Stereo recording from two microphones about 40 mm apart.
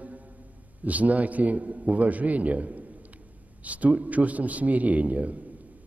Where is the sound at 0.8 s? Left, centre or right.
Right.